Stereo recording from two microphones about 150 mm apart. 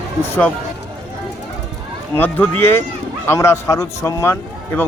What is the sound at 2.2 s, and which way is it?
A man's voice, 10° left (ahead or behind).